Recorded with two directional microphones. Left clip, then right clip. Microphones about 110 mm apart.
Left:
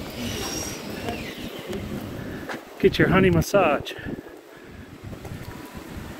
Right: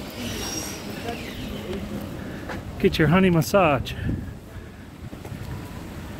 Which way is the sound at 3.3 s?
65° right (ahead or behind).